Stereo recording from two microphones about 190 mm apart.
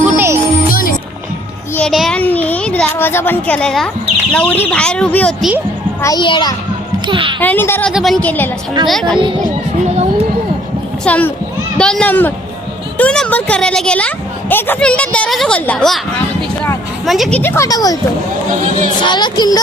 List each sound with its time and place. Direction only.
0.0 s music: 10° right (ahead or behind)
1.7 s a child's voice: centre (ahead or behind)
6.0 s a child's voice: 20° left (ahead or behind)
7.1 s speech: 25° right (ahead or behind)
7.3 s a woman's voice: 10° left (ahead or behind)
11.0 s a woman's voice: 10° left (ahead or behind)
17.1 s speech: centre (ahead or behind); by 17.9 s 20° left (ahead or behind)
19.0 s a child's voice: 25° left (ahead or behind)